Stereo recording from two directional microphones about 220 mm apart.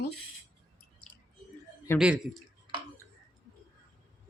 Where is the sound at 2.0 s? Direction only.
5° right (ahead or behind).